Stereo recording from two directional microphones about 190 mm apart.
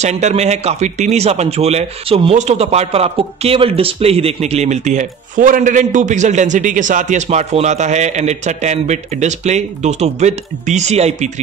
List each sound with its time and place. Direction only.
0.0 s a man's voice: 35° right (ahead or behind)